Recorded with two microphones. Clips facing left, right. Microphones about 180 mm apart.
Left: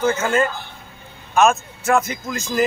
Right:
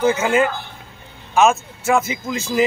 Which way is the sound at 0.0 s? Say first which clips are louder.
Right 2 dB; 10° right (ahead or behind).